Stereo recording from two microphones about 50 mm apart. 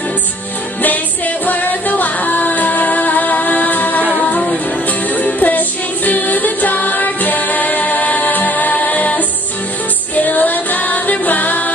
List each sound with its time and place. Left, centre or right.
0.8 s music: left